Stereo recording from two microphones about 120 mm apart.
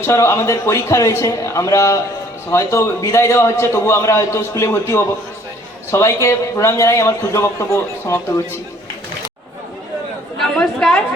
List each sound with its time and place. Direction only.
0.0 s a man's voice: 25° left (ahead or behind)
10.6 s chatter: 5° left (ahead or behind)